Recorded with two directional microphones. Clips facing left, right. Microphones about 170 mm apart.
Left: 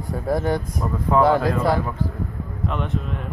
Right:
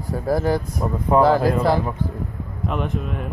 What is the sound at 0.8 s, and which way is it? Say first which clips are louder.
Speech: right 2 dB; 25° right (ahead or behind).